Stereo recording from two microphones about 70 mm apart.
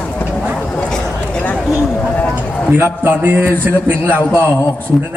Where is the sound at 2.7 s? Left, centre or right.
Right.